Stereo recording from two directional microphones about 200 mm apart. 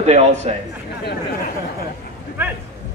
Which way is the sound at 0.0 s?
35° right (ahead or behind).